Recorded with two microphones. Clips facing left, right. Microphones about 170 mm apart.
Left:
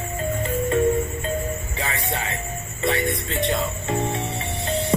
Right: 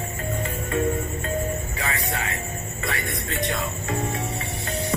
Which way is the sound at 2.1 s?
25° left (ahead or behind).